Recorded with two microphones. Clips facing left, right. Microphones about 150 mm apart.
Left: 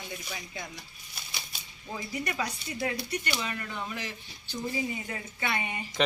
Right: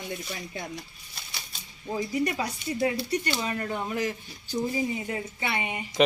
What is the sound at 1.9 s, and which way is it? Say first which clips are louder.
Speech: right 6 dB; 30° right (ahead or behind).